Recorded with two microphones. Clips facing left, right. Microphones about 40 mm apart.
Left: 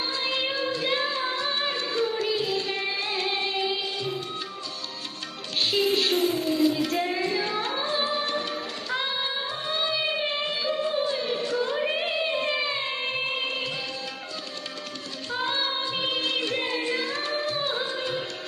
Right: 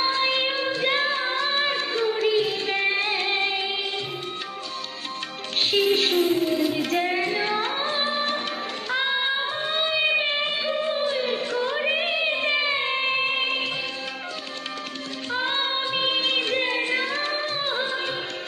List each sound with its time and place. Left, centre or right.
0.0 s music: right
5.7 s music: right
6.1 s singing: right
8.9 s music: right
15.3 s singing: right